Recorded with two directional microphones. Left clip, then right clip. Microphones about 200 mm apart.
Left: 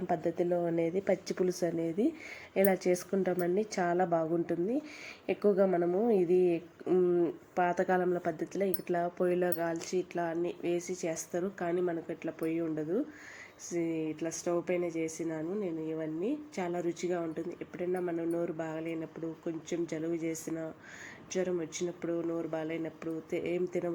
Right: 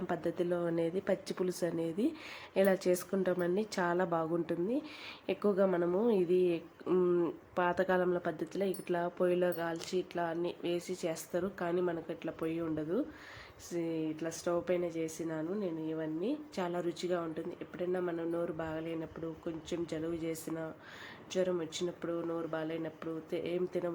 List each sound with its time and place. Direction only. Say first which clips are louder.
0.1 s a woman's voice: left 4 dB; 5° left (ahead or behind)
21.3 s a woman's voice: even; 5° left (ahead or behind)